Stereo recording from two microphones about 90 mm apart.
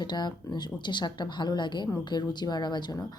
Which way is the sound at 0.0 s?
55° left (ahead or behind).